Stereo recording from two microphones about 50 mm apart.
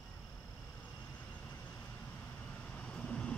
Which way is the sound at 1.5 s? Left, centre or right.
Left.